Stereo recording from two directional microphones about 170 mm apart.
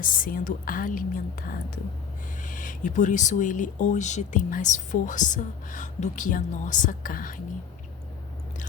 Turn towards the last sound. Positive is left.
turn(degrees=55)  # may be behind; listen again after turning